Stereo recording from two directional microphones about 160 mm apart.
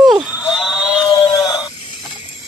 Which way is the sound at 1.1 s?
25° left (ahead or behind).